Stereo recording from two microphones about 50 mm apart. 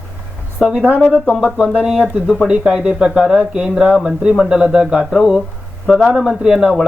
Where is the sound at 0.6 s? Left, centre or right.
Centre.